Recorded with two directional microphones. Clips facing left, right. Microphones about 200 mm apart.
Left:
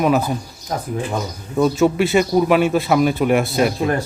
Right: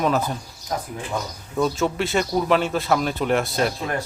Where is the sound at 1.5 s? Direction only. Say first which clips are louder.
Left 6 dB; 10° left (ahead or behind).